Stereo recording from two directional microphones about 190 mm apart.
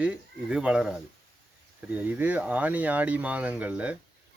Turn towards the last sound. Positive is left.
turn(degrees=-5)  # may be behind; listen again after turning